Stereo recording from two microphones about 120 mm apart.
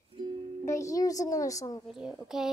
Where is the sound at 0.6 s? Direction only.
25° left (ahead or behind).